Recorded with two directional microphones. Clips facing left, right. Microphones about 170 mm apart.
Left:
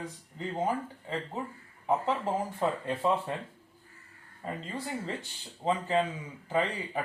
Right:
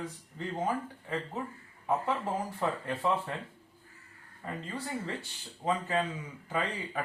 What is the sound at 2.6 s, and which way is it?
Speech, 20° left (ahead or behind).